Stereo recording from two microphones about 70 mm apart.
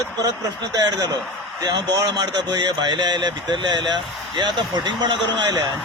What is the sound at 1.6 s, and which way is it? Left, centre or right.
Speech, right.